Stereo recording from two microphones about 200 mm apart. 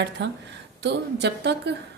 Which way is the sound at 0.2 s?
60° right (ahead or behind).